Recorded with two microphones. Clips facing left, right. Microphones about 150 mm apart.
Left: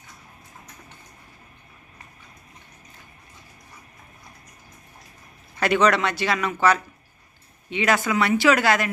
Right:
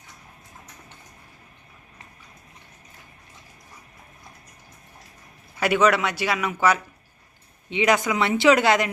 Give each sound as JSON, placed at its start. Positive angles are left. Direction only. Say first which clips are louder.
{"t": 5.5, "sound": "a man's voice", "louder": "even", "side_deg": -10}